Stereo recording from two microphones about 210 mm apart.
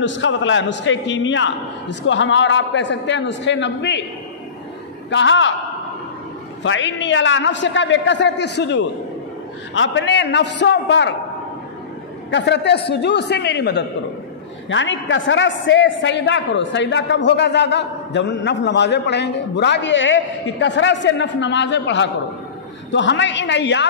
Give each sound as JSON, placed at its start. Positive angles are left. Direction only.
{"t": 0.0, "sound": "a man's voice", "side_deg": 60}
{"t": 5.1, "sound": "a man's voice", "side_deg": 60}
{"t": 6.6, "sound": "a man's voice", "side_deg": 65}
{"t": 12.3, "sound": "a man's voice", "side_deg": 55}
{"t": 14.7, "sound": "a man's voice", "side_deg": 60}